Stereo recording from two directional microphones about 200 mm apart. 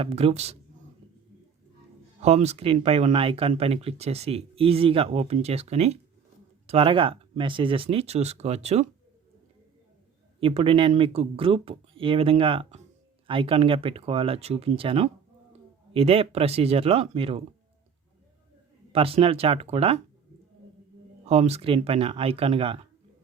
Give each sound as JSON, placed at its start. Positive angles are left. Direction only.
{"t": 0.0, "sound": "speech", "side_deg": -30}
{"t": 2.2, "sound": "speech", "side_deg": -30}
{"t": 10.4, "sound": "speech", "side_deg": -30}
{"t": 18.9, "sound": "speech", "side_deg": -30}
{"t": 21.2, "sound": "speech", "side_deg": -30}